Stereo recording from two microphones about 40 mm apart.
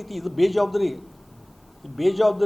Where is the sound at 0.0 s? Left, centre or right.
Centre.